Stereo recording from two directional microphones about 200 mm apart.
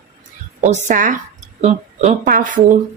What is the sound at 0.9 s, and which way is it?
A woman's voice, 40° right (ahead or behind).